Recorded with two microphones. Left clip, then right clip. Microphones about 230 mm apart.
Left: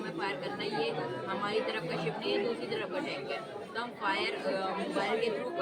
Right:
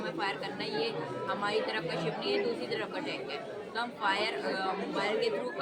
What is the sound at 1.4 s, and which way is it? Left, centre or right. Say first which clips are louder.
A woman's voice: right 1 dB; centre.